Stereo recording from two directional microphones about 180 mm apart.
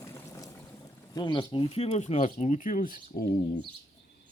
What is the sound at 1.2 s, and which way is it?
Speech, 25° left (ahead or behind).